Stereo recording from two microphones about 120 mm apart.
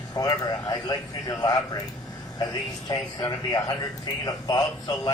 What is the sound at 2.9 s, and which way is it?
Speech, 30° left (ahead or behind).